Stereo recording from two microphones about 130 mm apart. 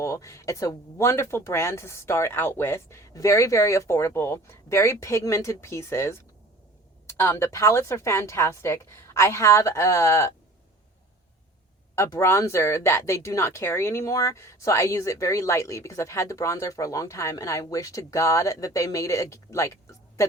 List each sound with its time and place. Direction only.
0.0 s speech: 25° left (ahead or behind)
11.9 s speech: 20° left (ahead or behind)